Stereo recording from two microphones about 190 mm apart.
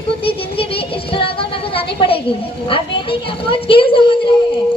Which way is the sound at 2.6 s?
30° left (ahead or behind).